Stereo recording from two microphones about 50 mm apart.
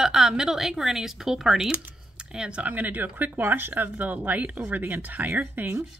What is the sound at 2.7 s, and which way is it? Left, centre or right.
Speech, right.